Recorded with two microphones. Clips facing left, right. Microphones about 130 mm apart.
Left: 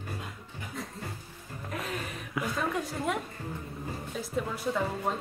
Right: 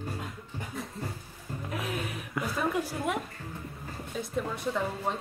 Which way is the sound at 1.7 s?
Centre (ahead or behind).